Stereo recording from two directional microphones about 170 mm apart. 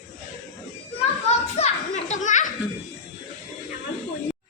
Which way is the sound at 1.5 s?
40° left (ahead or behind).